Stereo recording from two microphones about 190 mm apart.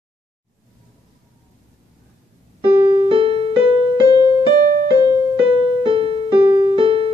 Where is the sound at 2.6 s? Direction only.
25° right (ahead or behind).